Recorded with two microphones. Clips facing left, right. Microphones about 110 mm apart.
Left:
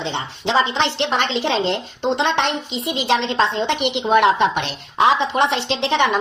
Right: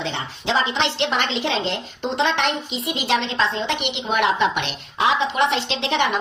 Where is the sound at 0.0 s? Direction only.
30° left (ahead or behind).